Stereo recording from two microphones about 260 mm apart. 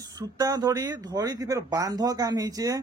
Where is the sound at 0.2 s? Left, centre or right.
Centre.